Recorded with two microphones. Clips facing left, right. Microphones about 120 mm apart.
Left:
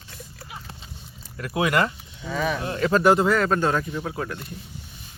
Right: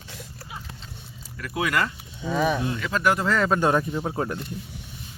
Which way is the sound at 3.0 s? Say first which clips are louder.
Left 4 dB; 30° left (ahead or behind).